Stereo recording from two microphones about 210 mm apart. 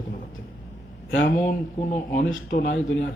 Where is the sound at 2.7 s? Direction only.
60° left (ahead or behind).